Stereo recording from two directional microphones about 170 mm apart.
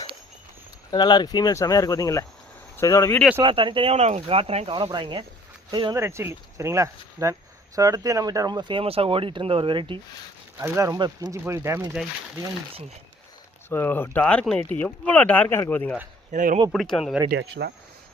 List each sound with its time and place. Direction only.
0.9 s speech: 25° left (ahead or behind)
3.4 s speech: 30° right (ahead or behind)
6.0 s speech: 15° right (ahead or behind)
10.6 s speech: 15° right (ahead or behind)
13.7 s speech: 10° left (ahead or behind)
16.3 s speech: 50° right (ahead or behind)
16.7 s speech: centre (ahead or behind)
17.2 s speech: 80° right